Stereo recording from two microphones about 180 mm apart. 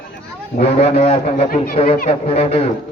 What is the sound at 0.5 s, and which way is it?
Speech, 35° left (ahead or behind).